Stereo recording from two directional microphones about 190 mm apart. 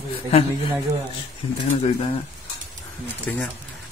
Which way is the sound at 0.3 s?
35° left (ahead or behind).